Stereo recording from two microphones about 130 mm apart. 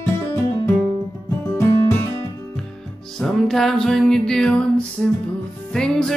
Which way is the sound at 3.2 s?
Centre (ahead or behind).